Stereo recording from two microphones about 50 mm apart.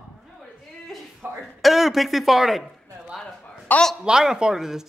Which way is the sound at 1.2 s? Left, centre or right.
Right.